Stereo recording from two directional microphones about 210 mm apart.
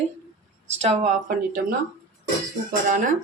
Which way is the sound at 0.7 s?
30° right (ahead or behind).